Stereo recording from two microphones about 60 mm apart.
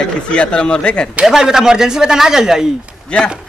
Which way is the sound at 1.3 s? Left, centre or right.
Centre.